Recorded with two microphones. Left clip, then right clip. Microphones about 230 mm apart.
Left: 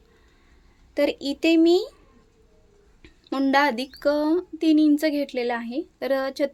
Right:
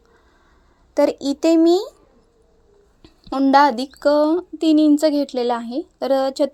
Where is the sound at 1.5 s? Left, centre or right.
Centre.